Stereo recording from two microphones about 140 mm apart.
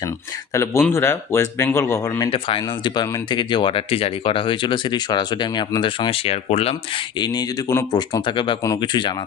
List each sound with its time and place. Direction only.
0.5 s speech: 20° left (ahead or behind)
2.3 s speech: 40° left (ahead or behind)
7.2 s speech: 30° left (ahead or behind)